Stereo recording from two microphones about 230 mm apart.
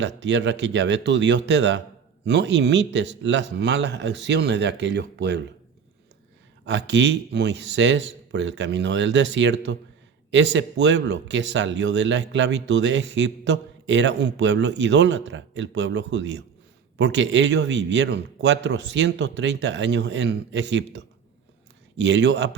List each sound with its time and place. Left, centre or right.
0.0 s speech: right
6.7 s speech: right